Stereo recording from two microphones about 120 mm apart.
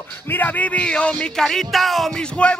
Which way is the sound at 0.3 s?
15° left (ahead or behind).